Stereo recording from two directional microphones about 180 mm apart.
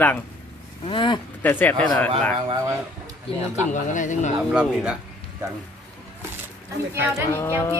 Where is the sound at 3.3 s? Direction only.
30° left (ahead or behind).